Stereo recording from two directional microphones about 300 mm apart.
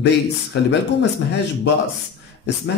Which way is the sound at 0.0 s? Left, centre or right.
Left.